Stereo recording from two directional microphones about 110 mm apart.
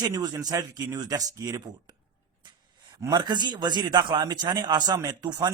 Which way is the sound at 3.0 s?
35° right (ahead or behind).